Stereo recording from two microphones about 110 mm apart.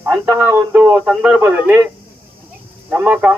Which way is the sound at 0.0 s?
20° right (ahead or behind).